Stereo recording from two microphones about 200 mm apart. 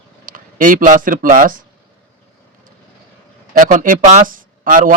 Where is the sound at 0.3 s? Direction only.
45° right (ahead or behind).